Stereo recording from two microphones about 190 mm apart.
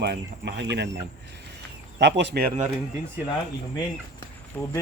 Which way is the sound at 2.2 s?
55° right (ahead or behind).